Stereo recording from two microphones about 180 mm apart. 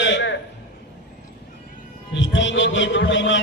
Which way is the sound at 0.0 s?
85° left.